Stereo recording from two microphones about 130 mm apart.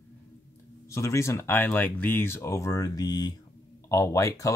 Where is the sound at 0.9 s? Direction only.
20° left (ahead or behind).